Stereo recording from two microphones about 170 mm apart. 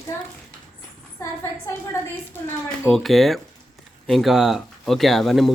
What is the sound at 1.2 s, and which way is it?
Speech, 15° left (ahead or behind).